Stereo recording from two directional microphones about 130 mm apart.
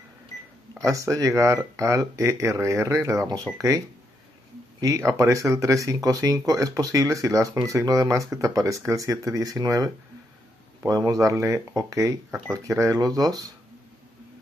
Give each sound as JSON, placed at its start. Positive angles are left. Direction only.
{"t": 0.8, "sound": "speech", "side_deg": -25}
{"t": 4.7, "sound": "speech", "side_deg": -25}